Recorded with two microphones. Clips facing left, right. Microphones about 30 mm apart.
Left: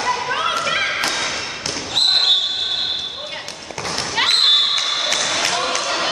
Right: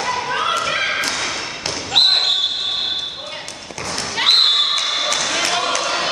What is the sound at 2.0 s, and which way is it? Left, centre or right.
Basketball bounce, right.